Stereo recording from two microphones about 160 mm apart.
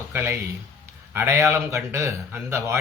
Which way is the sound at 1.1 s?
15° right (ahead or behind).